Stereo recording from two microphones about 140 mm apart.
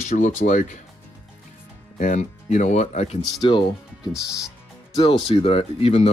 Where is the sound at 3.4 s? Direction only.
35° left (ahead or behind).